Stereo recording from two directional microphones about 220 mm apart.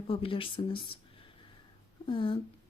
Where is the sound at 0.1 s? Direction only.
25° left (ahead or behind).